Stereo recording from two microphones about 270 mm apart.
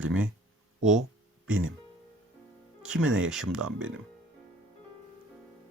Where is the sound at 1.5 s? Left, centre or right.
Right.